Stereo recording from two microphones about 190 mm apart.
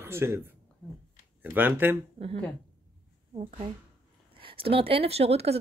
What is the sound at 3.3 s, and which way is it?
Speech, 35° right (ahead or behind).